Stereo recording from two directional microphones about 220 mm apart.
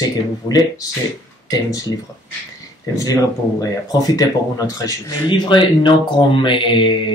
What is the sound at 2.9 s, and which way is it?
Speech, 15° left (ahead or behind).